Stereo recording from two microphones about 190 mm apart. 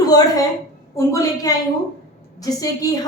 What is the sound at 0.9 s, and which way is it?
A woman's voice, 15° left (ahead or behind).